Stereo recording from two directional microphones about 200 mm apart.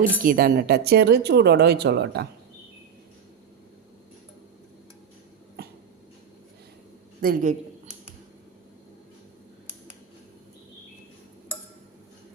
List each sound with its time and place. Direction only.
0.2 s speech: 45° right (ahead or behind)
7.2 s a man's voice: 45° right (ahead or behind)